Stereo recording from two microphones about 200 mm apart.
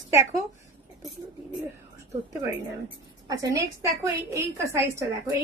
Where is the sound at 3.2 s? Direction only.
15° right (ahead or behind).